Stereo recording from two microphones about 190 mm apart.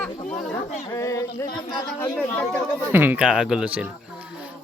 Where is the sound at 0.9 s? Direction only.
15° left (ahead or behind).